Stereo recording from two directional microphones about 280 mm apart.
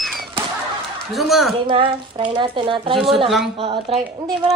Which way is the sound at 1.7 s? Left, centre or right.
Centre.